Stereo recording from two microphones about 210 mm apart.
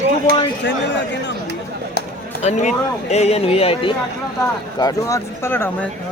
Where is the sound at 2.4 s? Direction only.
35° left (ahead or behind).